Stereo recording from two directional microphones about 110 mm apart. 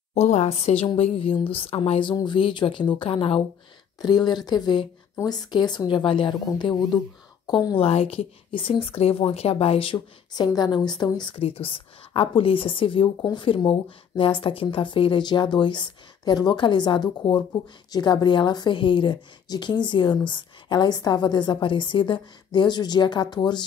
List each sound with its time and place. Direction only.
0.1 s speech: 90° left
0.9 s a woman's voice: 65° left (ahead or behind)
4.0 s a woman's voice: 40° left (ahead or behind)
6.4 s a woman's voice: 35° left (ahead or behind)
7.7 s a woman's voice: 70° left (ahead or behind)
9.9 s a woman's voice: 40° left (ahead or behind)
11.4 s speech: 60° left (ahead or behind); by 23.6 s 40° left (ahead or behind)